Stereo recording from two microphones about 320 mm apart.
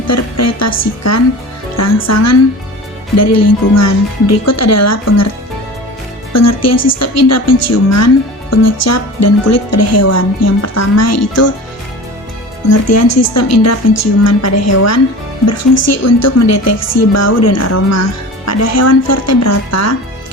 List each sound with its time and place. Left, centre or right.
0.1 s a woman's voice: left
6.3 s a woman's voice: left
12.6 s a woman's voice: left